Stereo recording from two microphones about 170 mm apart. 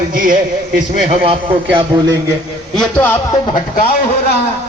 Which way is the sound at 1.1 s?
35° right (ahead or behind).